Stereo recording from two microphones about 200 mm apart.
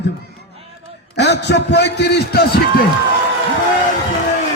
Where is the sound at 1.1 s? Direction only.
60° left (ahead or behind).